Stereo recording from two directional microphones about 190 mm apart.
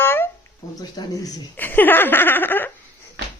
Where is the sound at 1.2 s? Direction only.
10° left (ahead or behind).